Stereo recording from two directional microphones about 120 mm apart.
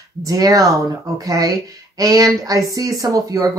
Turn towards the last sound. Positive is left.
turn(degrees=-30)  # may be behind; listen again after turning